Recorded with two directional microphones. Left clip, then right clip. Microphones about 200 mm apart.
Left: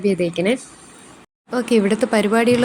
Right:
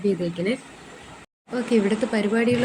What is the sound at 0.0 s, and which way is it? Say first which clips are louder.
Speech: left 6 dB; 35° left (ahead or behind).